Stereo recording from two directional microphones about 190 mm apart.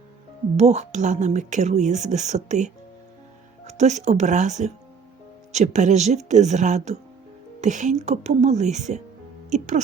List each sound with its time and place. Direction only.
0.5 s a woman's voice: 35° right (ahead or behind)